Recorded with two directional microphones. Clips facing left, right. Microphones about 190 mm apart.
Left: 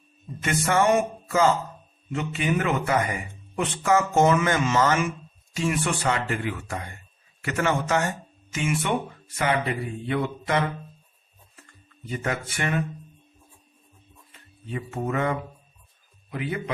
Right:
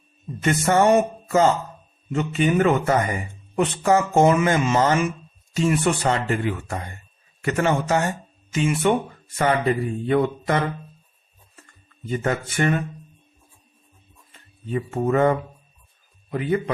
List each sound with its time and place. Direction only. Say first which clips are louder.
0.4 s a man's voice: right 4 dB; 35° right (ahead or behind)
12.2 s a man's voice: right 6 dB; 35° right (ahead or behind)
14.7 s a man's voice: right 7 dB; 40° right (ahead or behind)